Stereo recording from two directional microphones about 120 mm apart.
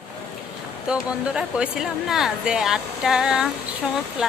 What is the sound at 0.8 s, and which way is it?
Speech, 10° right (ahead or behind).